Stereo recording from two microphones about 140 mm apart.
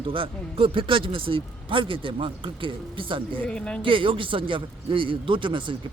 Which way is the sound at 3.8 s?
40° right (ahead or behind).